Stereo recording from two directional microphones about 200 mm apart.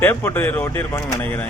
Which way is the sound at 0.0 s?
10° left (ahead or behind).